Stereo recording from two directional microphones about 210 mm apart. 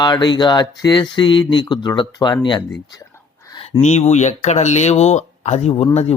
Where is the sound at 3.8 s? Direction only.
35° left (ahead or behind).